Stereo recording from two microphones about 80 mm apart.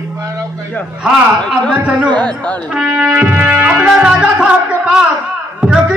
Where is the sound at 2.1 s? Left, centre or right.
Centre.